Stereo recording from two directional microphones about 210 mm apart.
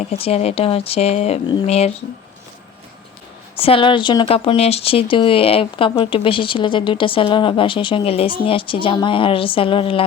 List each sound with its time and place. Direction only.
0.0 s speech: 30° left (ahead or behind)
3.5 s speech: 25° left (ahead or behind)